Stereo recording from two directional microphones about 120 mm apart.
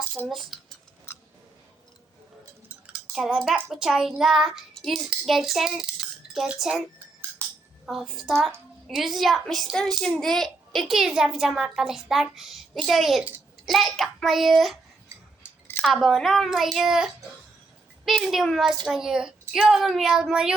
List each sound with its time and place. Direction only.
0.3 s a child's voice: centre (ahead or behind)
2.8 s a child's voice: 5° right (ahead or behind)
7.4 s cutlery: 25° right (ahead or behind)
7.9 s a child's voice: centre (ahead or behind)
15.8 s a child's voice: centre (ahead or behind)